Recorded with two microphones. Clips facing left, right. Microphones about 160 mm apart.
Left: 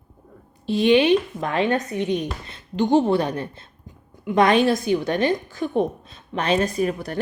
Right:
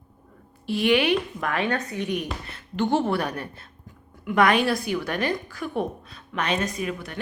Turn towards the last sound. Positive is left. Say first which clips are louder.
# left 7 dB
turn(degrees=40)  # may be behind; listen again after turning